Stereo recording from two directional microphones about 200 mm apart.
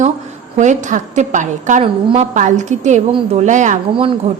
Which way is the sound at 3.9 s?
25° right (ahead or behind).